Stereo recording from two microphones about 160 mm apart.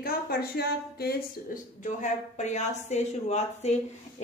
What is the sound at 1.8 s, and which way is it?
Speech, 50° left (ahead or behind).